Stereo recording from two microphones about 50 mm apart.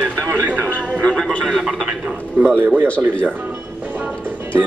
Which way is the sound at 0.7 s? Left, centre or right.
Left.